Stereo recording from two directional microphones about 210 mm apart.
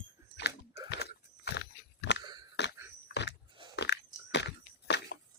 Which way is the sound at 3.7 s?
55° left (ahead or behind).